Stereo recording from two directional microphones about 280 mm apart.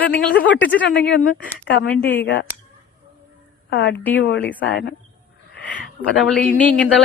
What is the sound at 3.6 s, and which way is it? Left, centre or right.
Speech, left.